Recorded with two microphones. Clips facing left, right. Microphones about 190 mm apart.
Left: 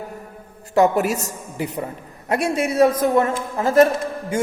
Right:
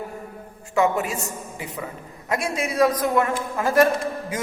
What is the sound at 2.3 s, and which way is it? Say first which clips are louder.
A man's voice: left 5 dB; 30° left (ahead or behind).